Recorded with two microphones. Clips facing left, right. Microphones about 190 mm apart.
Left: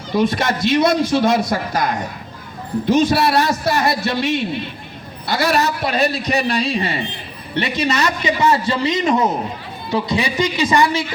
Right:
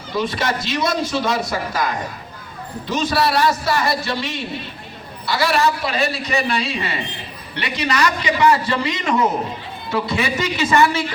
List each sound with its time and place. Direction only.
0.1 s a man's voice: 50° left (ahead or behind); by 11.0 s 15° left (ahead or behind)